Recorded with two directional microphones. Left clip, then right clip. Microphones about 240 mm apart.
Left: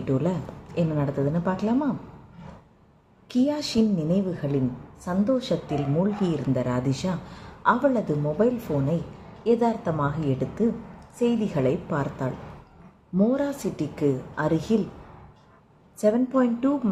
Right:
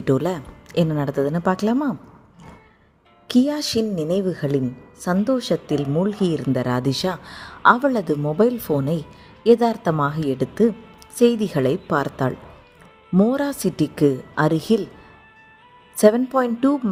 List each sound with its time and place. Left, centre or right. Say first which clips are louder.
0.0 s speech: right 6 dB; right
3.2 s speech: right 5 dB; right
16.0 s speech: right 6 dB; right